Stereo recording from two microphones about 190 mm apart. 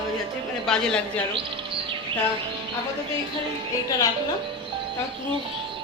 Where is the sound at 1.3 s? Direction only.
30° right (ahead or behind).